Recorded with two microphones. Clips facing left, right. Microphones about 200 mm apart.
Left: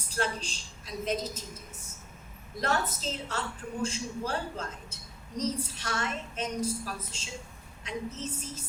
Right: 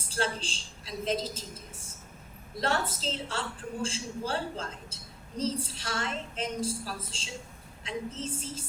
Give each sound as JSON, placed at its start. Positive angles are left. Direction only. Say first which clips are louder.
{"t": 0.1, "sound": "a woman's voice", "louder": "even", "side_deg": -30}
{"t": 2.6, "sound": "a woman's voice", "louder": "even", "side_deg": -30}